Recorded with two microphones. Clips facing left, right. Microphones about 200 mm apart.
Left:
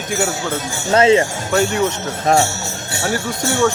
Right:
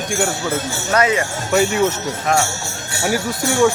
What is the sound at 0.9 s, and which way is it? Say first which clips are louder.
Speech: left 5 dB; 25° left (ahead or behind).